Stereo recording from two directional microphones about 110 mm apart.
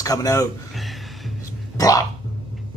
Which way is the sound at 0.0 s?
30° left (ahead or behind).